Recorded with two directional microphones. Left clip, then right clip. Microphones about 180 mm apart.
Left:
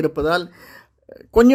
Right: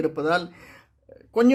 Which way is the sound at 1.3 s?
35° left (ahead or behind).